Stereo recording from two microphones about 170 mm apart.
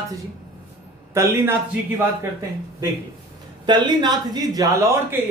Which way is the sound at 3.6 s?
25° right (ahead or behind).